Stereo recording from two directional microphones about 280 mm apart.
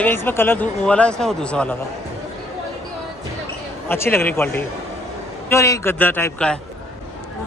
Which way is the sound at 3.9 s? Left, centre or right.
Centre.